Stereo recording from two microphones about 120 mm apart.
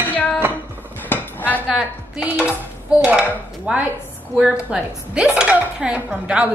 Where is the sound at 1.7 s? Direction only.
5° right (ahead or behind).